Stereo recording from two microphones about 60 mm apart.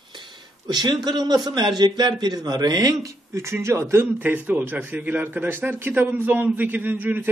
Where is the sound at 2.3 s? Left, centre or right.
Right.